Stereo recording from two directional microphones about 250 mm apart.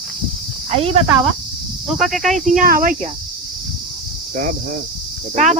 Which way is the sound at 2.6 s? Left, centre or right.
Right.